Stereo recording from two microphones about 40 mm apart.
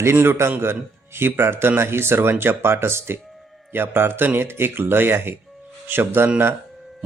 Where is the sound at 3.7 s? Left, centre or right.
Right.